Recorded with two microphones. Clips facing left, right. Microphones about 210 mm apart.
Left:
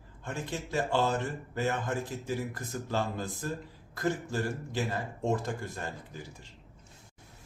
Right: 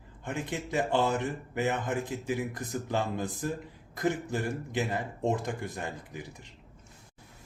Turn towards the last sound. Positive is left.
turn(degrees=-15)  # may be behind; listen again after turning